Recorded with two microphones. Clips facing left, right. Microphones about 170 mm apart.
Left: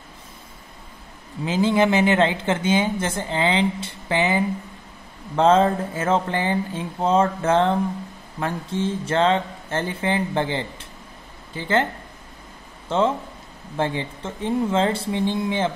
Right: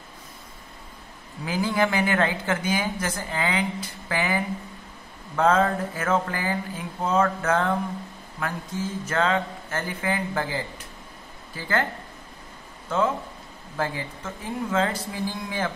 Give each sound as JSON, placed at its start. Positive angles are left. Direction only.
{"t": 1.4, "sound": "speech", "side_deg": 25}
{"t": 12.9, "sound": "speech", "side_deg": 25}